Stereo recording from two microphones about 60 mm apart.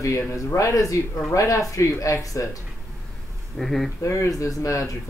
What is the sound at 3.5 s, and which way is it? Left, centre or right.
Speech, centre.